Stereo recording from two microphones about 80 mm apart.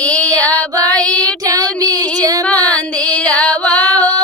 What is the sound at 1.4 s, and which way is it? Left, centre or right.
Child singing, right.